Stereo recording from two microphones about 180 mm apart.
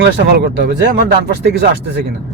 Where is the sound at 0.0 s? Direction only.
65° right (ahead or behind).